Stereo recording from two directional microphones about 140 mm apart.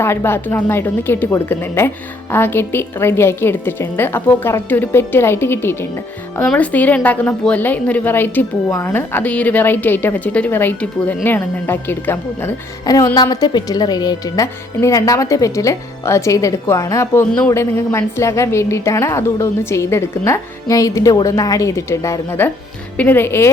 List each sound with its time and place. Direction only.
0.0 s a woman's voice: 15° left (ahead or behind)
12.8 s a woman's voice: 25° left (ahead or behind)